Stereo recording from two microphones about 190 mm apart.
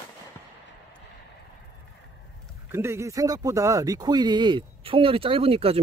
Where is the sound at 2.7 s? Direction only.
15° right (ahead or behind).